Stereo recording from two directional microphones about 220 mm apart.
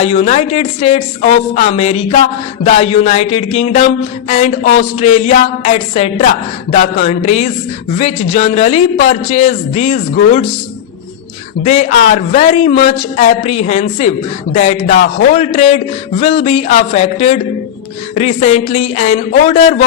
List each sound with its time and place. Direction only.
0.0 s a man's voice: 30° left (ahead or behind)
11.6 s a man's voice: 30° left (ahead or behind)